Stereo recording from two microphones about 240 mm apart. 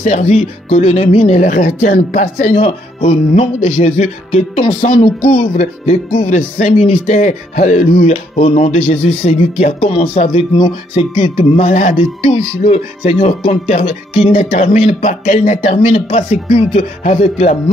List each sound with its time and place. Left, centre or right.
0.0 s speech: left